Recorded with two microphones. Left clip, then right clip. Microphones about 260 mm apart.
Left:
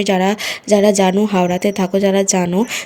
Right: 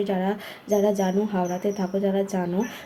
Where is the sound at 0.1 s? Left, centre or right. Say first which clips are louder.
Left 11 dB; left.